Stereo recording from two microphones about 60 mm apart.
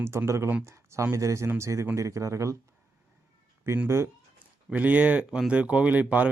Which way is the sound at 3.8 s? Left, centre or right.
Right.